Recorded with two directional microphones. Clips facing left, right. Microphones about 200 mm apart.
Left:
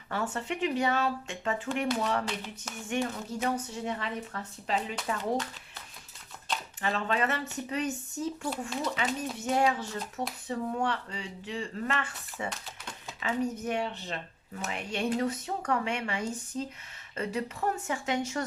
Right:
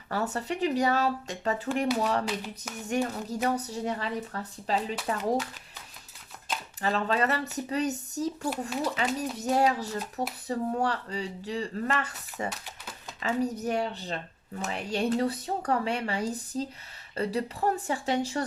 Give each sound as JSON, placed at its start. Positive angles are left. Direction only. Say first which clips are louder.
{"t": 0.1, "sound": "speech", "louder": "right 2 dB", "side_deg": -40}
{"t": 6.8, "sound": "speech", "louder": "right 3 dB", "side_deg": -40}
{"t": 12.5, "sound": "typewriter", "louder": "right 1 dB", "side_deg": -5}
{"t": 13.1, "sound": "speech", "louder": "right 2 dB", "side_deg": -40}